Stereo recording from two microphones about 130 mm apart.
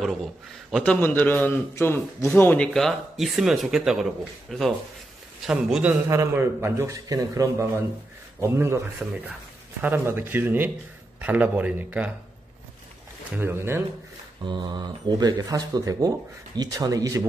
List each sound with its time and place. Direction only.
0.0 s a man's voice: centre (ahead or behind)
0.9 s a man's voice: 15° left (ahead or behind); by 5.9 s 10° right (ahead or behind)
6.0 s a man's voice: 20° right (ahead or behind)
13.4 s a man's voice: 15° right (ahead or behind)
14.4 s a man's voice: 35° right (ahead or behind)